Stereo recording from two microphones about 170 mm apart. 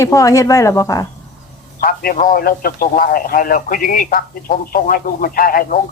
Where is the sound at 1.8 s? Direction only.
55° left (ahead or behind).